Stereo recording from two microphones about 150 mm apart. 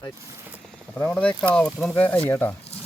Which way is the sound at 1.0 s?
10° left (ahead or behind).